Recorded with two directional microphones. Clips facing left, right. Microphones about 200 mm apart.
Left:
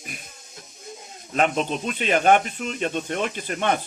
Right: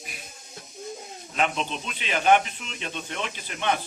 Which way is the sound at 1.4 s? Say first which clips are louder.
Left 5 dB; 45° left (ahead or behind).